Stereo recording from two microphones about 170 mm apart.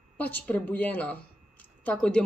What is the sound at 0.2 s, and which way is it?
A woman's voice, 10° left (ahead or behind).